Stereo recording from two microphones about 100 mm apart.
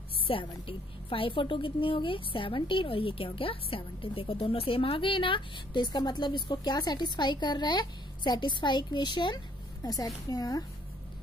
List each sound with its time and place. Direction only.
0.3 s a woman's voice: 60° left (ahead or behind)
9.8 s a woman's voice: 40° left (ahead or behind)